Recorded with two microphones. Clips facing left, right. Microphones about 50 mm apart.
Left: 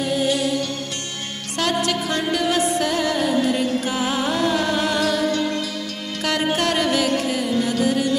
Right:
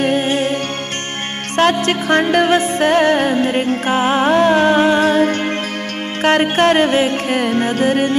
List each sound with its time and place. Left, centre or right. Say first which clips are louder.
0.0 s music: right 5 dB; right
1.6 s music: right 7 dB; right